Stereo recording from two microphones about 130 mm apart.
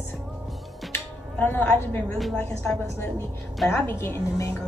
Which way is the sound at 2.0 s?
Centre (ahead or behind).